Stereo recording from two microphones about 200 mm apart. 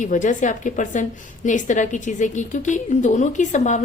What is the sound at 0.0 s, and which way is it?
A woman's voice, 40° left (ahead or behind).